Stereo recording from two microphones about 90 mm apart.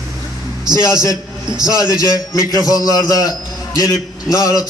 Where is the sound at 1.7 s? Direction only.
45° left (ahead or behind).